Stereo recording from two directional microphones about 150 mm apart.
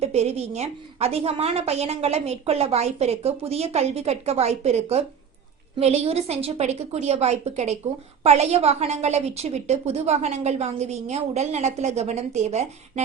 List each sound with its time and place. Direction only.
0.0 s a woman's voice: 45° right (ahead or behind)